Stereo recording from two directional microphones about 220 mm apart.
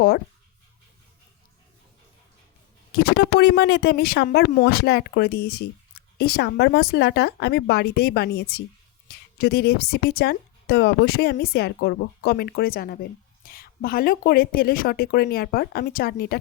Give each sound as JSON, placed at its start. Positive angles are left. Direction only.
{"t": 2.9, "sound": "speech", "side_deg": 45}